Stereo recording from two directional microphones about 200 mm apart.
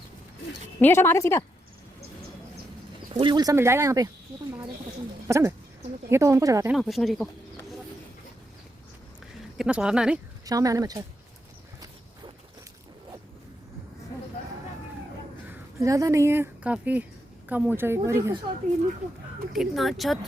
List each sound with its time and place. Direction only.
0.8 s a woman's voice: 10° left (ahead or behind)
3.1 s speech: 25° right (ahead or behind)
5.3 s speech: 15° right (ahead or behind)
6.7 s speech: centre (ahead or behind)
9.6 s speech: 5° right (ahead or behind)
10.4 s speech: 20° right (ahead or behind)
15.4 s speech: 15° right (ahead or behind)
19.5 s speech: centre (ahead or behind)